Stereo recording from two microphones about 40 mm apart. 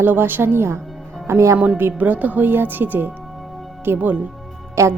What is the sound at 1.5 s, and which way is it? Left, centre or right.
Speech, right.